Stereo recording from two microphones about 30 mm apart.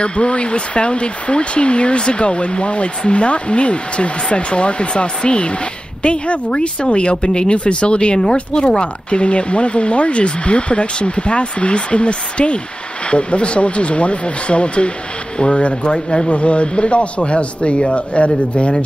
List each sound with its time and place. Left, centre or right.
0.0 s a woman's voice: left